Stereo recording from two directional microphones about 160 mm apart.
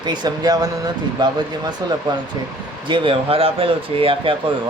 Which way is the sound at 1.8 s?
25° right (ahead or behind).